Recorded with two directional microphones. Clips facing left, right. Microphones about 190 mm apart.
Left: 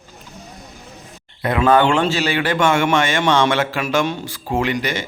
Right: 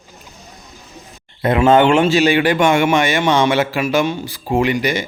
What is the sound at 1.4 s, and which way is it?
A man's voice, 25° right (ahead or behind).